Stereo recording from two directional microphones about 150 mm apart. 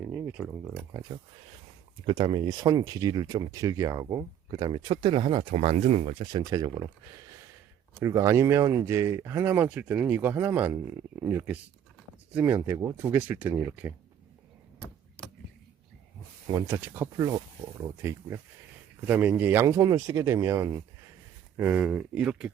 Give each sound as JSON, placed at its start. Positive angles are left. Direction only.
{"t": 0.3, "sound": "speech", "side_deg": -5}
{"t": 0.9, "sound": "speech", "side_deg": -25}
{"t": 5.5, "sound": "speech", "side_deg": -45}
{"t": 6.3, "sound": "speech", "side_deg": -25}
{"t": 8.0, "sound": "speech", "side_deg": -20}
{"t": 16.5, "sound": "speech", "side_deg": -20}
{"t": 17.2, "sound": "speech", "side_deg": -25}